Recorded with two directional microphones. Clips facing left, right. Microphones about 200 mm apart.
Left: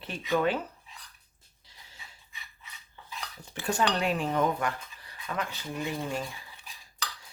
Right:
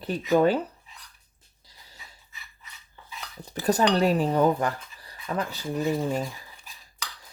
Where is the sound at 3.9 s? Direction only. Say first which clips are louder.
Right 6 dB; 40° right (ahead or behind).